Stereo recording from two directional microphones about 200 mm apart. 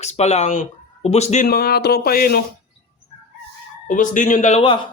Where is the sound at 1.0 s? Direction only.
30° left (ahead or behind).